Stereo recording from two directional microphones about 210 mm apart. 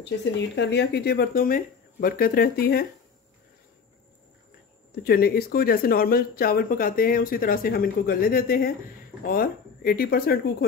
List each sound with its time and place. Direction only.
0.6 s speech: 55° left (ahead or behind)
5.0 s speech: 45° left (ahead or behind)